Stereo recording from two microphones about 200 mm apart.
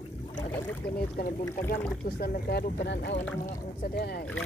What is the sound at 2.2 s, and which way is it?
Speech, 50° left (ahead or behind).